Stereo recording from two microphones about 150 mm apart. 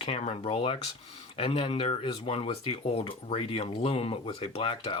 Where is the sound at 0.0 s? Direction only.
40° left (ahead or behind).